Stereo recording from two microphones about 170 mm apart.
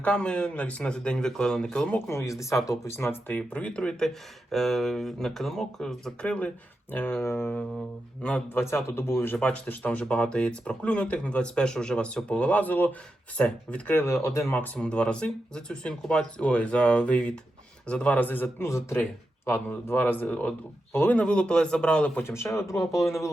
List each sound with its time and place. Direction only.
0.0 s speech: 5° left (ahead or behind)
2.0 s speech: 15° left (ahead or behind)